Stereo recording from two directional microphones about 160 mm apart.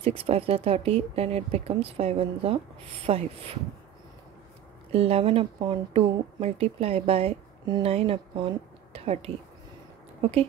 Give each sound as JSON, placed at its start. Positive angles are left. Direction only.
{"t": 0.0, "sound": "speech", "side_deg": -35}
{"t": 4.9, "sound": "speech", "side_deg": -40}